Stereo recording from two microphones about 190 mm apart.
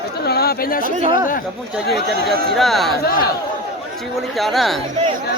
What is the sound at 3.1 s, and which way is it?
Speech, 50° left (ahead or behind).